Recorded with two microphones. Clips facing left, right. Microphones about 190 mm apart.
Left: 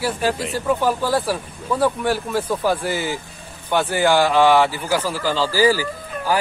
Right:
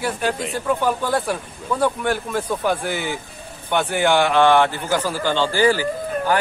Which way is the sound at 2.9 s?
60° right (ahead or behind).